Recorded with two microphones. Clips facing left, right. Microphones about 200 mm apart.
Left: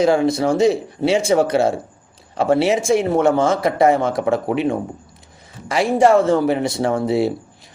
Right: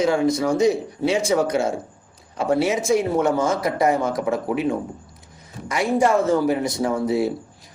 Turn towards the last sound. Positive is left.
turn(degrees=30)  # may be behind; listen again after turning